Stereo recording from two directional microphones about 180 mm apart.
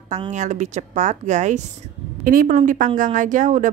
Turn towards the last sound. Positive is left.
turn(degrees=-45)  # may be behind; listen again after turning